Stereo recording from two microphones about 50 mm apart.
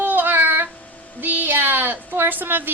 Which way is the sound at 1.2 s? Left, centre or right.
Right.